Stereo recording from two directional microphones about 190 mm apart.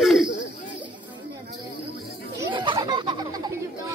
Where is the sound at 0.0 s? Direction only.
Centre (ahead or behind).